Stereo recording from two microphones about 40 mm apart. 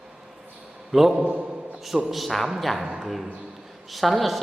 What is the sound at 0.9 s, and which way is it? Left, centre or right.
Speech, centre.